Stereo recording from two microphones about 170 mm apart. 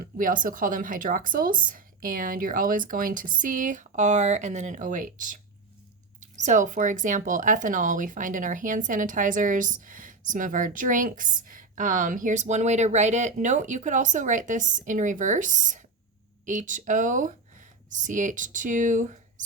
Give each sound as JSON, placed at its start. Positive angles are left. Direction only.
{"t": 0.0, "sound": "speech", "side_deg": -55}